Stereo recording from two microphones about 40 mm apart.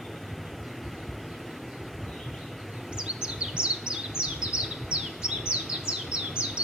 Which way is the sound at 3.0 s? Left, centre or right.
Right.